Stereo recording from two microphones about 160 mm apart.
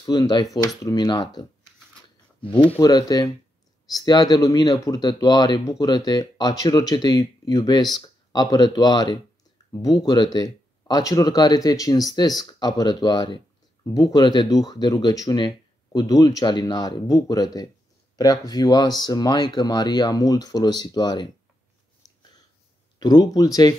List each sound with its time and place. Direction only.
0.0 s speech: 25° left (ahead or behind)
2.4 s speech: 30° left (ahead or behind)
22.9 s speech: 25° left (ahead or behind)